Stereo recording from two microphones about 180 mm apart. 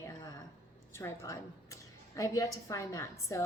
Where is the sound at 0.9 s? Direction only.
15° left (ahead or behind).